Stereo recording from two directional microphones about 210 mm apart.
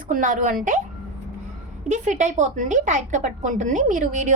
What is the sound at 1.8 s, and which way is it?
A woman's voice, 35° right (ahead or behind).